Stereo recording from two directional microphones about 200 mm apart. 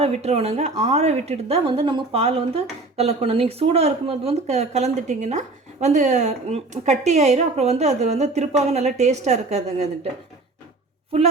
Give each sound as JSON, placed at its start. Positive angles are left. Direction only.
{"t": 0.0, "sound": "a woman's voice", "side_deg": -30}